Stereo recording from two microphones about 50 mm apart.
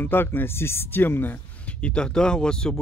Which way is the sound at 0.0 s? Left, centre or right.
Left.